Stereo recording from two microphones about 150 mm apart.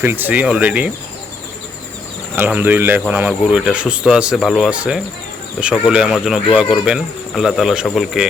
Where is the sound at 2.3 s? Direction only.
10° right (ahead or behind).